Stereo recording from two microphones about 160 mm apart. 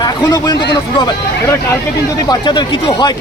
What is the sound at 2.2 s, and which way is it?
Speech, 30° left (ahead or behind).